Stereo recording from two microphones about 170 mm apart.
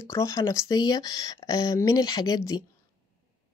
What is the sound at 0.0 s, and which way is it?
A woman's voice, 15° left (ahead or behind).